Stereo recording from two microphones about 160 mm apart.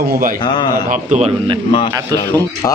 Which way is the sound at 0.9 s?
45° right (ahead or behind).